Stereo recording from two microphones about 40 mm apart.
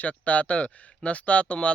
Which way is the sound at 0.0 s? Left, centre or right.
Left.